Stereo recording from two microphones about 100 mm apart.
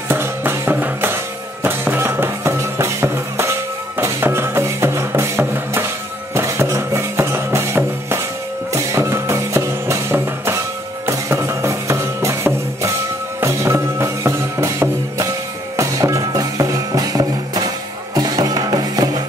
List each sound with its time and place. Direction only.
0.1 s music: 25° right (ahead or behind); by 19.2 s 40° right (ahead or behind)